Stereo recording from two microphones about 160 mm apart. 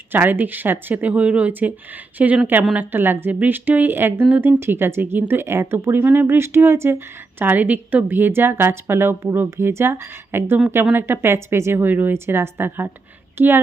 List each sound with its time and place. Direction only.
0.1 s a woman's voice: 10° right (ahead or behind)